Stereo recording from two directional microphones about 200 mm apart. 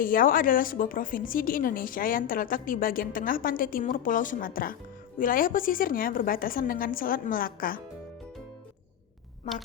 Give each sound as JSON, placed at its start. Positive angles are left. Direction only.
{"t": 0.0, "sound": "a woman's voice", "side_deg": 45}